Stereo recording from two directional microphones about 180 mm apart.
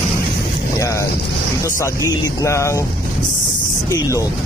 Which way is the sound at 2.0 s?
20° left (ahead or behind).